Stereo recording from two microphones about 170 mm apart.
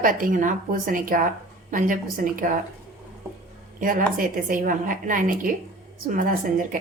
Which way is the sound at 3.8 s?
55° right (ahead or behind).